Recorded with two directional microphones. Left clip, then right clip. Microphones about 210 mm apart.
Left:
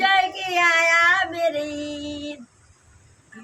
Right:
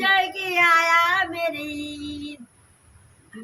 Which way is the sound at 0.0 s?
Centre (ahead or behind).